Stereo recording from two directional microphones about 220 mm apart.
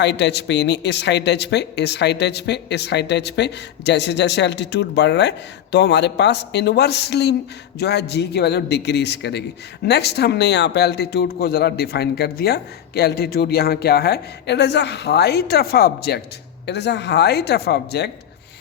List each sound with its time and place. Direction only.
0.0 s speech: 50° left (ahead or behind)